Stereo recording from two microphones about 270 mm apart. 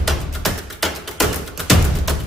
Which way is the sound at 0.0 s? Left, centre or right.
Centre.